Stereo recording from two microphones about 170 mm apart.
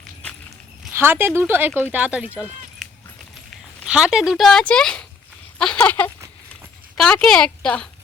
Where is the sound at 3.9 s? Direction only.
5° right (ahead or behind).